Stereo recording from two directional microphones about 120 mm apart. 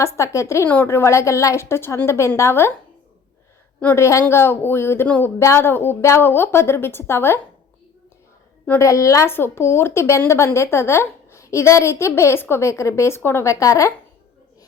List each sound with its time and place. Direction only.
0.0 s a woman's voice: 25° left (ahead or behind)
3.8 s a woman's voice: 20° left (ahead or behind)
8.8 s a woman's voice: 25° left (ahead or behind)